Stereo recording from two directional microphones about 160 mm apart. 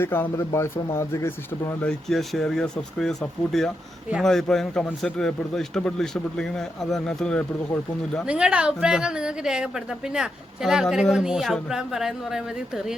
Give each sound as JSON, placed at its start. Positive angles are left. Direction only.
{"t": 0.0, "sound": "speech", "side_deg": 15}
{"t": 1.9, "sound": "a woman's voice", "side_deg": 0}
{"t": 8.3, "sound": "a woman's voice", "side_deg": -5}